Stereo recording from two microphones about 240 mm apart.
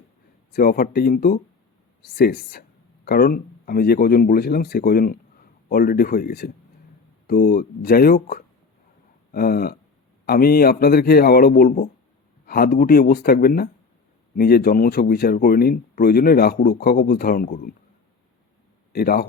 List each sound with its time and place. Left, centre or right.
0.5 s speech: left
18.9 s speech: left